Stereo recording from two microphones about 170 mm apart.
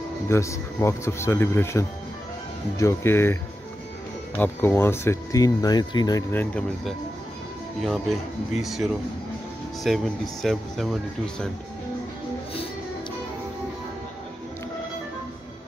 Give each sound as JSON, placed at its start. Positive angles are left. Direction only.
{"t": 0.3, "sound": "speech", "side_deg": 15}
{"t": 4.4, "sound": "speech", "side_deg": 10}
{"t": 6.3, "sound": "speech", "side_deg": 10}
{"t": 7.8, "sound": "speech", "side_deg": 0}